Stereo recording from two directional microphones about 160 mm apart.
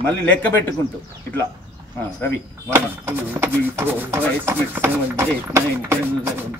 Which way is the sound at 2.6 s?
15° right (ahead or behind).